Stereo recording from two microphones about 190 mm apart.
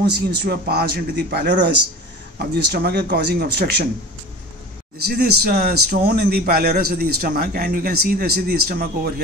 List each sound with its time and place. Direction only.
0.3 s speech: 55° right (ahead or behind)
5.0 s a man's voice: 55° right (ahead or behind)